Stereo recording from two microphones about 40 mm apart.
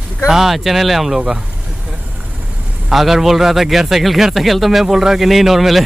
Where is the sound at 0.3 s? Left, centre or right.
Centre.